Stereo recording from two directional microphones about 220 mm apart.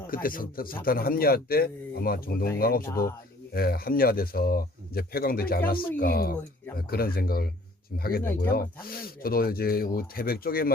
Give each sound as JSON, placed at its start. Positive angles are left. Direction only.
{"t": 0.1, "sound": "speech", "side_deg": 40}